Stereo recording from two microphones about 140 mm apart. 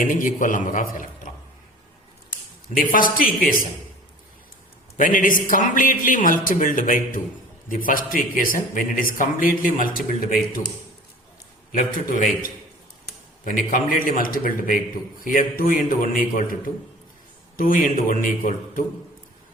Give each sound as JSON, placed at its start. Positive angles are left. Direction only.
{"t": 0.0, "sound": "a man's voice", "side_deg": 70}
{"t": 2.7, "sound": "speech", "side_deg": 80}
{"t": 4.9, "sound": "a man's voice", "side_deg": 70}
{"t": 7.7, "sound": "speech", "side_deg": 85}
{"t": 11.7, "sound": "speech", "side_deg": 80}
{"t": 13.4, "sound": "a man's voice", "side_deg": 70}
{"t": 15.2, "sound": "a man's voice", "side_deg": 75}